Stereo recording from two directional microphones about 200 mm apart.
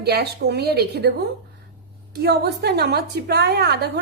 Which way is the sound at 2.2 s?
55° right (ahead or behind).